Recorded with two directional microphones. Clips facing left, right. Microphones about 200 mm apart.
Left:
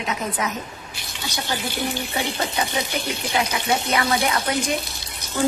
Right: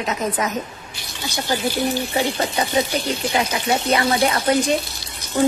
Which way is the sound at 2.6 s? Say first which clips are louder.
Right 1 dB; 35° right (ahead or behind).